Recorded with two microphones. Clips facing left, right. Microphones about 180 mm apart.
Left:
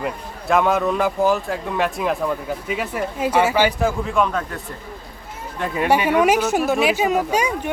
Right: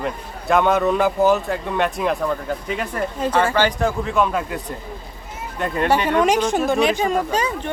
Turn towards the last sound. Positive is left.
turn(degrees=10)  # may be behind; listen again after turning